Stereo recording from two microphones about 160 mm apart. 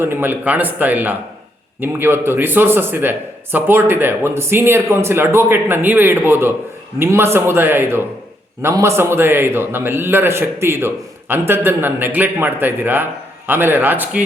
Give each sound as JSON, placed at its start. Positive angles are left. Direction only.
{"t": 0.0, "sound": "speech", "side_deg": -15}